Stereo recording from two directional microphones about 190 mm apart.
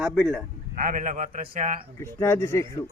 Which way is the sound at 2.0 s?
15° left (ahead or behind).